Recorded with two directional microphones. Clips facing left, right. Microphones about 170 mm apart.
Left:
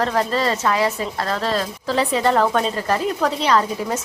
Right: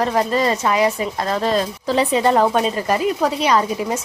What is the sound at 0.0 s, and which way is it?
A woman's voice, 15° right (ahead or behind).